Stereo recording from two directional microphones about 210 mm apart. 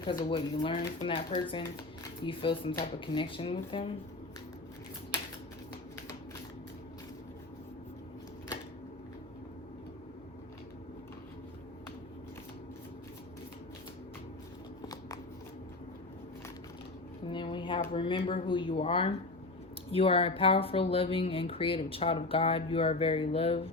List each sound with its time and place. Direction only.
0.1 s speech: 25° left (ahead or behind)
17.2 s a sound: 25° left (ahead or behind)
17.9 s speech: 25° left (ahead or behind)